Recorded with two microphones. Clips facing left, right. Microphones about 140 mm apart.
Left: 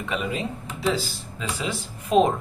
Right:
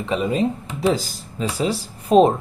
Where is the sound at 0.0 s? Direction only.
30° right (ahead or behind).